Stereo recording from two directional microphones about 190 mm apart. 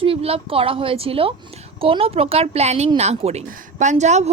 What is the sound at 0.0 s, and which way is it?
A woman's voice, 30° right (ahead or behind).